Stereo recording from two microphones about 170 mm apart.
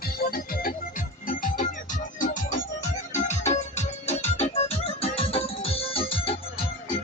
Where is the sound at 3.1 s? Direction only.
45° left (ahead or behind).